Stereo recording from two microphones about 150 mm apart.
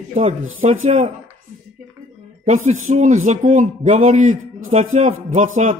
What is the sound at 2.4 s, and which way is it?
A man's voice, 50° right (ahead or behind).